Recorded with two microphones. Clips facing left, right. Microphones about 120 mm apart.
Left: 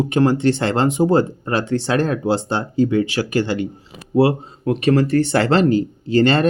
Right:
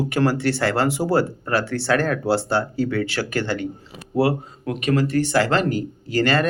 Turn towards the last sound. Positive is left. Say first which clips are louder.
# left 4 dB
turn(degrees=25)  # may be behind; listen again after turning